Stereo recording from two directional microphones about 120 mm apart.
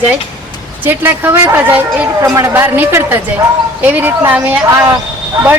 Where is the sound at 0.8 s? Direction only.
15° right (ahead or behind).